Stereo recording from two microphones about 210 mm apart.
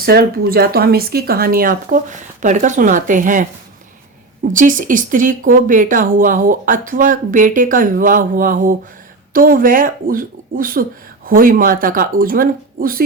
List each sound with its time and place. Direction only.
0.0 s speech: 45° right (ahead or behind)
4.5 s speech: 40° right (ahead or behind)